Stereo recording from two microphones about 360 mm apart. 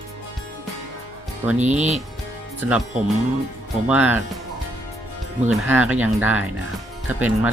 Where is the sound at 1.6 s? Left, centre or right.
Centre.